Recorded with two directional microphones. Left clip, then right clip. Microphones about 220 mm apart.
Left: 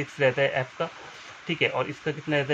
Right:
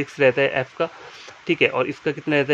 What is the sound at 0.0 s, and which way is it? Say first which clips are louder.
Speech: right 5 dB; 50° right (ahead or behind).